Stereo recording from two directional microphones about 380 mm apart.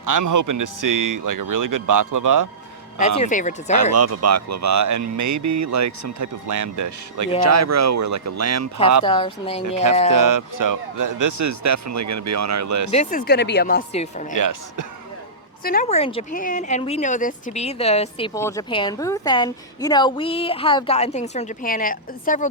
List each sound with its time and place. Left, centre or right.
0.0 s speech: right
3.2 s speech: centre
3.9 s speech: right
9.0 s speech: centre
9.6 s speech: right
12.9 s speech: centre
14.3 s speech: right
15.6 s speech: left